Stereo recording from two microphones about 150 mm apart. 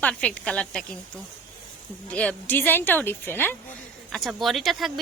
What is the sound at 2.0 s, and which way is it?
A woman's voice, 10° left (ahead or behind).